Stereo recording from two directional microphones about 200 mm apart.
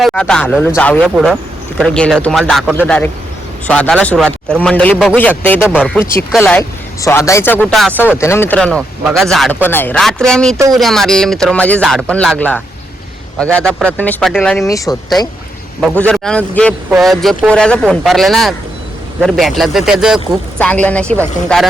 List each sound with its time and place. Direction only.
0.0 s a man's voice: 5° left (ahead or behind)
15.8 s a man's voice: 5° left (ahead or behind)